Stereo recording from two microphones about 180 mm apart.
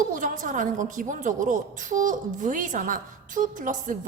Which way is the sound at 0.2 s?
45° right (ahead or behind).